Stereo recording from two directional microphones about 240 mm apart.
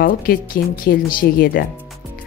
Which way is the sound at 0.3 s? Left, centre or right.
Left.